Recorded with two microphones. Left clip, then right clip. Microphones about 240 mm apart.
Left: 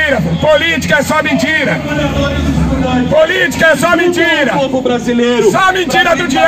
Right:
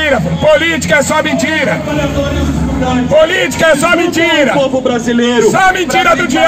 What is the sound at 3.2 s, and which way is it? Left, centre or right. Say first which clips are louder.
A man's voice: even; right.